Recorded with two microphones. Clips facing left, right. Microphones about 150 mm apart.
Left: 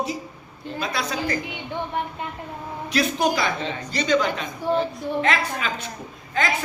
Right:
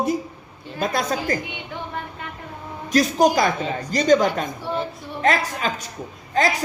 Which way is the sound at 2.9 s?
45° right (ahead or behind).